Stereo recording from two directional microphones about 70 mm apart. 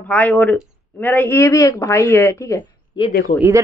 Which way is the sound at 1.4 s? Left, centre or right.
Left.